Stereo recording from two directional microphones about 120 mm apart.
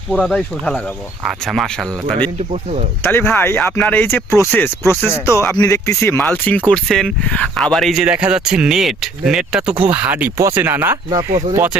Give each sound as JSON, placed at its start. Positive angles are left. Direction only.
{"t": 0.1, "sound": "speech", "side_deg": 5}
{"t": 3.0, "sound": "speech", "side_deg": 20}
{"t": 6.1, "sound": "speech", "side_deg": 10}
{"t": 8.0, "sound": "speech", "side_deg": -10}
{"t": 11.1, "sound": "speech", "side_deg": -30}